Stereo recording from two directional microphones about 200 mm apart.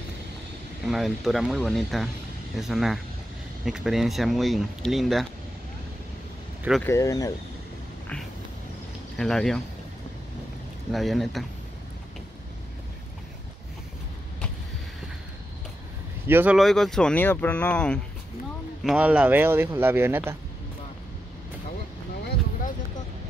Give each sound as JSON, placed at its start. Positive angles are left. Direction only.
{"t": 0.8, "sound": "speech", "side_deg": 0}
{"t": 6.8, "sound": "speech", "side_deg": 15}
{"t": 9.2, "sound": "speech", "side_deg": 5}
{"t": 10.9, "sound": "speech", "side_deg": 0}
{"t": 16.3, "sound": "speech", "side_deg": -10}
{"t": 16.5, "sound": "speech", "side_deg": 0}
{"t": 18.9, "sound": "a man's voice", "side_deg": -5}